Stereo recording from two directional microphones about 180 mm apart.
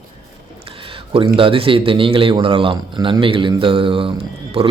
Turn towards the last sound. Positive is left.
turn(degrees=-35)  # may be behind; listen again after turning